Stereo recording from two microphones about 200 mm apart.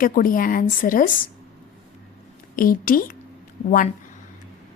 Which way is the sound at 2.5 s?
45° left (ahead or behind).